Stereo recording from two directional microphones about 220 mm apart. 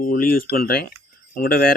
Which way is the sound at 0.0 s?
40° left (ahead or behind).